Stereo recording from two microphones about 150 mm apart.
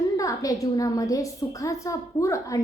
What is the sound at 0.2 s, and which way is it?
A woman's voice, 20° left (ahead or behind).